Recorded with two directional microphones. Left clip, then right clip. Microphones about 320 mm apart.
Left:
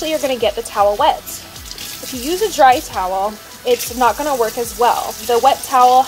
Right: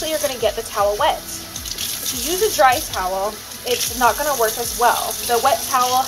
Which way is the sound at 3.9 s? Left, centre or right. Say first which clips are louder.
Right 1 dB; left.